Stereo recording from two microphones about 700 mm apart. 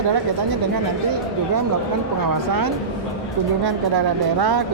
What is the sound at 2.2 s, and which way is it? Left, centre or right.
Speech, right.